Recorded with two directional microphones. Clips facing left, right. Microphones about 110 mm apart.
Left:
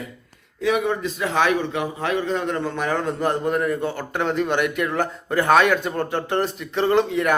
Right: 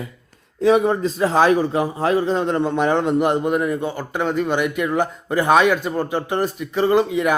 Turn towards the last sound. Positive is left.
turn(degrees=-10)  # may be behind; listen again after turning